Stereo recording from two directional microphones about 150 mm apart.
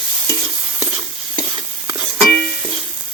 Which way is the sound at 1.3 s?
35° right (ahead or behind).